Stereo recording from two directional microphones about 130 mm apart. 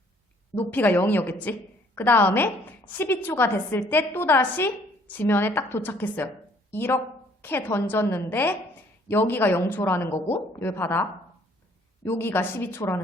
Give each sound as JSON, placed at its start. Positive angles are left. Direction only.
{"t": 0.5, "sound": "a woman's voice", "side_deg": 15}
{"t": 12.0, "sound": "a woman's voice", "side_deg": 20}